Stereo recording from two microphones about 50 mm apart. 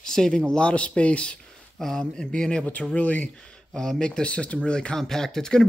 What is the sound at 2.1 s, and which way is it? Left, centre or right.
Speech, centre.